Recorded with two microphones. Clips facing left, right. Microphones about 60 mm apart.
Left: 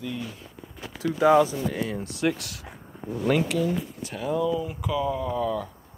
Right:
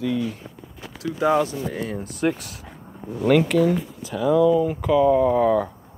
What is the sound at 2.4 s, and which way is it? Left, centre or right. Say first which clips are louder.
Speech: right 1 dB; left.